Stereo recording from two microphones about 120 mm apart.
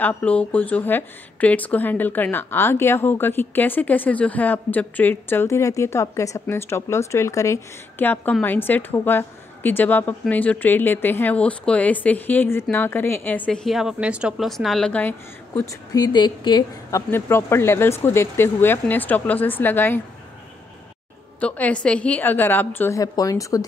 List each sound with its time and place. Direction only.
0.0 s speech: 15° left (ahead or behind)
13.7 s speech: 5° right (ahead or behind); by 15.6 s 15° left (ahead or behind)
15.6 s a woman's voice: 30° left (ahead or behind)
16.9 s speech: 20° left (ahead or behind)
21.4 s speech: 10° left (ahead or behind)
22.9 s speech: 30° left (ahead or behind)